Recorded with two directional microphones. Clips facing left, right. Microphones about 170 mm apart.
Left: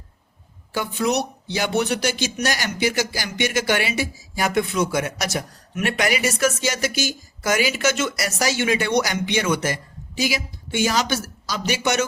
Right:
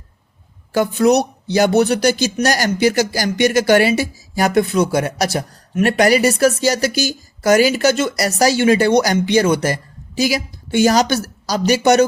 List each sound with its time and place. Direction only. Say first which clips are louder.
0.7 s speech: right 9 dB; 45° right (ahead or behind)